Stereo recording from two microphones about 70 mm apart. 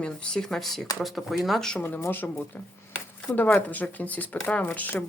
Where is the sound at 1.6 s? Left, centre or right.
Centre.